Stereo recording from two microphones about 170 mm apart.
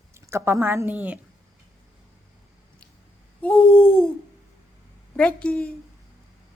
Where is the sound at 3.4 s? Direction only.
5° left (ahead or behind).